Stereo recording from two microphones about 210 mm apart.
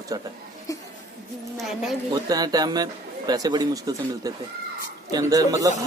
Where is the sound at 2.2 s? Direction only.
20° right (ahead or behind).